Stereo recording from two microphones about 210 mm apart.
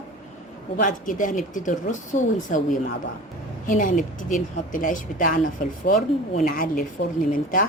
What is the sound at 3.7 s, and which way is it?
A woman's voice, 40° left (ahead or behind).